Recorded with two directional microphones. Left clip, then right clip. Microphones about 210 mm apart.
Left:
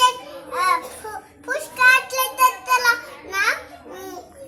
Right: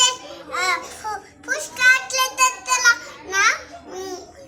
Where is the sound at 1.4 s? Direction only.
15° left (ahead or behind).